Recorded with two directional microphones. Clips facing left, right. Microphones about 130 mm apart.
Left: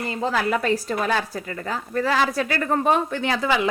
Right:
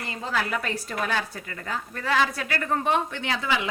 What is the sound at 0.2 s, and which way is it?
Speech, 35° left (ahead or behind).